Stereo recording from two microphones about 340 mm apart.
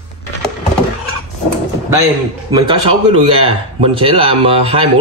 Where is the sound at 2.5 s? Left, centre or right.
Centre.